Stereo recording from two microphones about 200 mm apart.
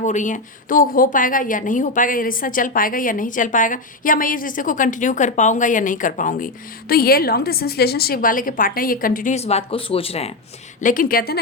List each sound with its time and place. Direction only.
0.0 s a woman's voice: 40° left (ahead or behind)
10.8 s a woman's voice: 40° left (ahead or behind)